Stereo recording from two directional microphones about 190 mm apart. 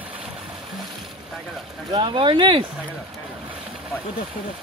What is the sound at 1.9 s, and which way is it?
Speech, 25° right (ahead or behind).